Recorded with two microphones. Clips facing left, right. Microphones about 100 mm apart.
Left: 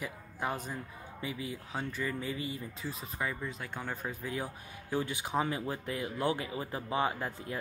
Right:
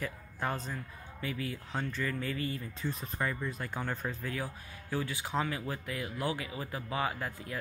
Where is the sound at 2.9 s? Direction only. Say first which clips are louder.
Right 2 dB; 5° left (ahead or behind).